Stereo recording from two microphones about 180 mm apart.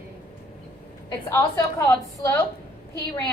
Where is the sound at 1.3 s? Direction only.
15° left (ahead or behind).